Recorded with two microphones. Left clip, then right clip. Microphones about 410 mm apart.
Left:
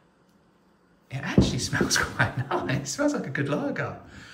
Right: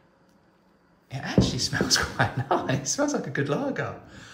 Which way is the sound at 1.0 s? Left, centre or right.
Centre.